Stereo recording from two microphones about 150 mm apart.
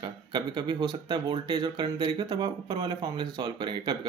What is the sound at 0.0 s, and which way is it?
Speech, 30° right (ahead or behind).